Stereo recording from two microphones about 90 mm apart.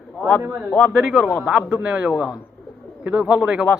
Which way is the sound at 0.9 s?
Centre (ahead or behind).